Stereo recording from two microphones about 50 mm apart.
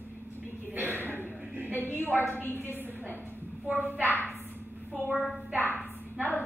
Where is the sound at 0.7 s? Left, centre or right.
Right.